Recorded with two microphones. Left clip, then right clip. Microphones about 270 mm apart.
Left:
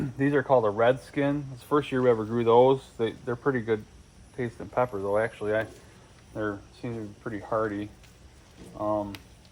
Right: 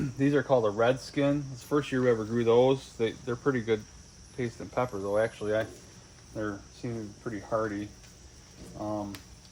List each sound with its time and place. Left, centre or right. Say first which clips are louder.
0.0 s speech: left 1 dB; centre